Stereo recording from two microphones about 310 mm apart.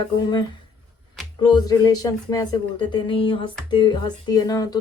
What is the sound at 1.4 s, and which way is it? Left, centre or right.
Speech, centre.